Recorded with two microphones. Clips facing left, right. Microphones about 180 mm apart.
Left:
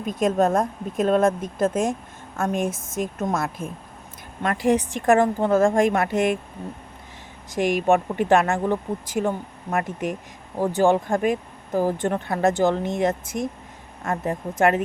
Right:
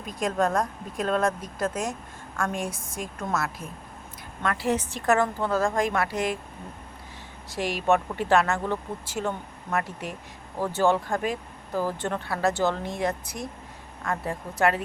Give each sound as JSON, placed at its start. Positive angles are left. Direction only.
{"t": 0.0, "sound": "a woman's voice", "side_deg": 20}
{"t": 5.6, "sound": "a woman's voice", "side_deg": 50}
{"t": 5.9, "sound": "a woman's voice", "side_deg": 20}
{"t": 6.1, "sound": "speech", "side_deg": 55}
{"t": 7.6, "sound": "a woman's voice", "side_deg": 50}
{"t": 7.9, "sound": "a woman's voice", "side_deg": 15}
{"t": 9.2, "sound": "a woman's voice", "side_deg": 50}
{"t": 9.8, "sound": "a woman's voice", "side_deg": 15}
{"t": 11.2, "sound": "speech", "side_deg": 50}
{"t": 11.9, "sound": "a woman's voice", "side_deg": 15}
{"t": 13.3, "sound": "speech", "side_deg": 60}
{"t": 14.0, "sound": "a woman's voice", "side_deg": 20}